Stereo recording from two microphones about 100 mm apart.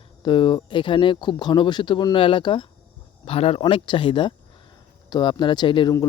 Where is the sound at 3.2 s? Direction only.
75° left (ahead or behind).